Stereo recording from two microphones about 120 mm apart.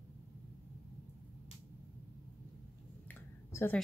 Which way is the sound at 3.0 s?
20° left (ahead or behind).